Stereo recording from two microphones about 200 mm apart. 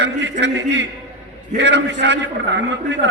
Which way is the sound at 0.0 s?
60° right (ahead or behind).